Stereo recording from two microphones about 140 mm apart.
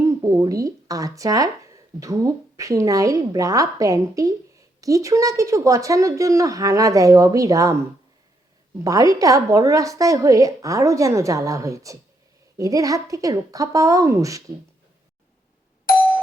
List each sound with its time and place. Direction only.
0.0 s a woman's voice: 25° right (ahead or behind)
8.8 s a woman's voice: 25° right (ahead or behind)